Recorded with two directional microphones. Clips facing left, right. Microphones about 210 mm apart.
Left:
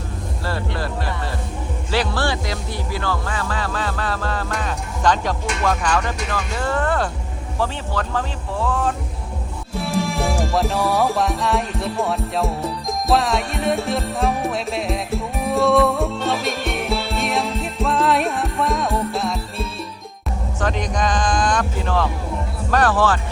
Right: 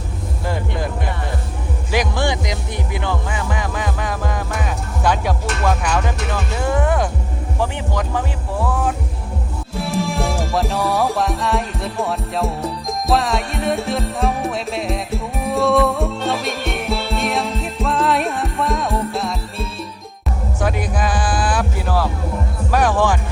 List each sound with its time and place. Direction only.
0.4 s vehicle: 15° right (ahead or behind)
1.9 s speech: 15° right (ahead or behind)
9.7 s music: centre (ahead or behind)
22.7 s speech: 10° right (ahead or behind)